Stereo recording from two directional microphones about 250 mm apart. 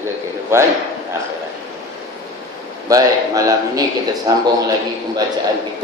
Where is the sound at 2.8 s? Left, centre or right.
Centre.